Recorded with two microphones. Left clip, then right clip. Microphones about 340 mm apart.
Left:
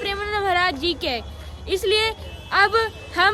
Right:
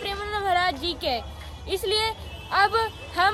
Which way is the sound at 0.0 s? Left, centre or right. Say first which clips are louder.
Left 4 dB; centre.